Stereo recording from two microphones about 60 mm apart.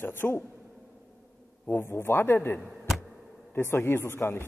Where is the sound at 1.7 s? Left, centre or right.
Left.